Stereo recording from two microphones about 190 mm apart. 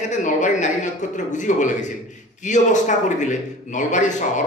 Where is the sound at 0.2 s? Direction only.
40° left (ahead or behind).